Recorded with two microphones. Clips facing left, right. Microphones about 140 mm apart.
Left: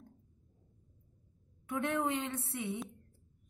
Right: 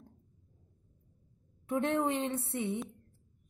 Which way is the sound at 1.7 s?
30° right (ahead or behind).